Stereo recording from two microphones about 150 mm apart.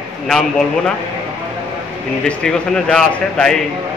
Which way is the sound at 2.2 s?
5° left (ahead or behind).